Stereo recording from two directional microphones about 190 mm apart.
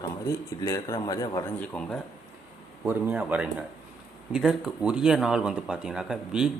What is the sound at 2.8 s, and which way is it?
A man's voice, 10° right (ahead or behind).